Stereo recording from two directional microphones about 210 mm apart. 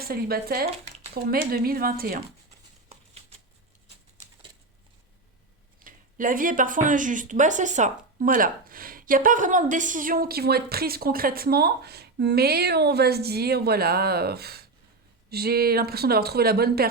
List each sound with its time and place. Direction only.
0.0 s speech: 45° right (ahead or behind)
5.8 s speech: 40° right (ahead or behind)